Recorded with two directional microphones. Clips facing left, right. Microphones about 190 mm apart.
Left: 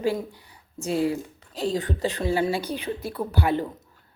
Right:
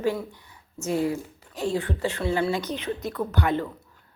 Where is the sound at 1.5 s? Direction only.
35° left (ahead or behind).